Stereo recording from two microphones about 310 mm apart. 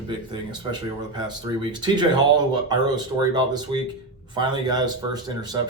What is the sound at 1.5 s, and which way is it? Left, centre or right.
Speech, centre.